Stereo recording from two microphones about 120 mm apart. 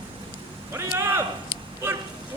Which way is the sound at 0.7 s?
25° right (ahead or behind).